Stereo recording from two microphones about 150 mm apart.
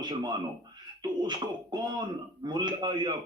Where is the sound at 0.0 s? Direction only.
30° right (ahead or behind).